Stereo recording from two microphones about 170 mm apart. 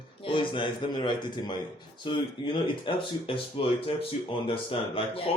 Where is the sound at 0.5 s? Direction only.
30° left (ahead or behind).